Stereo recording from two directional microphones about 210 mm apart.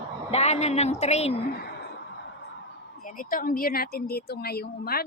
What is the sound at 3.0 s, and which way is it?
Speech, 40° left (ahead or behind).